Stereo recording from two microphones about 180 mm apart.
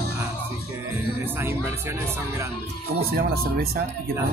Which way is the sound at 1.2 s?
10° right (ahead or behind).